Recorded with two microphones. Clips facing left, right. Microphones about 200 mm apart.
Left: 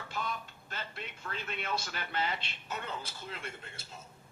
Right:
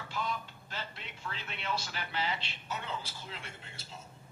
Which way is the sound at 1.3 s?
50° left (ahead or behind).